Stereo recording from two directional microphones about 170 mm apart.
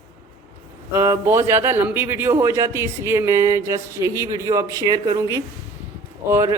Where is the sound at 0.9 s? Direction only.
15° right (ahead or behind).